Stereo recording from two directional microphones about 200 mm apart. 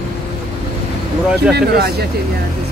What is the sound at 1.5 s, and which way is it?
Speech, 50° right (ahead or behind).